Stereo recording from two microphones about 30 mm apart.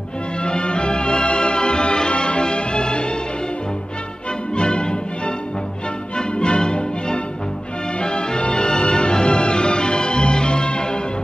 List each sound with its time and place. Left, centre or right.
0.4 s music: left
4.6 s music: left